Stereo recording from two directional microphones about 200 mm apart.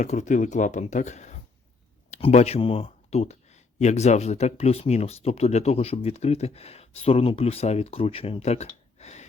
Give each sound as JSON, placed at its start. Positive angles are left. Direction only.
{"t": 0.0, "sound": "speech", "side_deg": 35}